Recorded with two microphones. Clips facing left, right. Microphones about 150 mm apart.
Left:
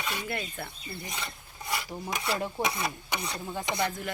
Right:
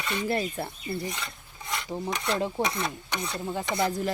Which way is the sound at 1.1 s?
5° left (ahead or behind).